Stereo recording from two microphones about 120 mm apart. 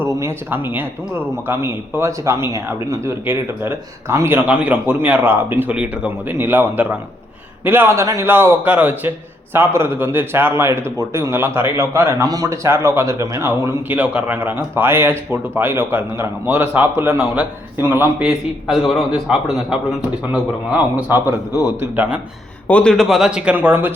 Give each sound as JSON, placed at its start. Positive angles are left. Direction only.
{"t": 0.0, "sound": "a man's voice", "side_deg": -20}
{"t": 18.2, "sound": "a man's voice", "side_deg": -5}
{"t": 22.6, "sound": "a man's voice", "side_deg": 10}